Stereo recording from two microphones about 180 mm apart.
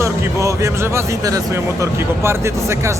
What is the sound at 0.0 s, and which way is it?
Speech, 15° right (ahead or behind).